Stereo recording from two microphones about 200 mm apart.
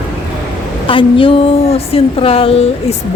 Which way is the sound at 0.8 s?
25° left (ahead or behind).